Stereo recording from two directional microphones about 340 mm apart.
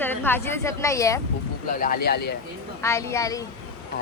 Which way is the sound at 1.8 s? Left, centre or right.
Left.